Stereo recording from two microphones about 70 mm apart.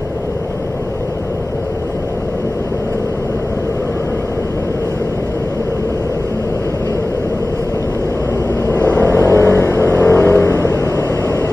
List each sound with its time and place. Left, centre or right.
8.6 s vehicle: left